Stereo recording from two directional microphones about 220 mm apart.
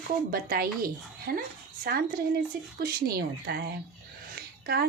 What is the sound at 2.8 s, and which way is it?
A woman's voice, 45° right (ahead or behind).